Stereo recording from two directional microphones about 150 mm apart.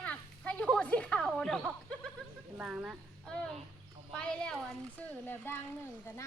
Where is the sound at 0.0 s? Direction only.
10° left (ahead or behind).